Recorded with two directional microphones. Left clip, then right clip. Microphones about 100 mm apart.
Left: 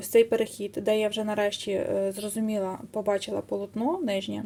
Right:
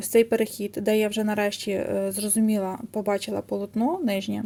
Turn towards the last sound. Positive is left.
turn(degrees=-35)  # may be behind; listen again after turning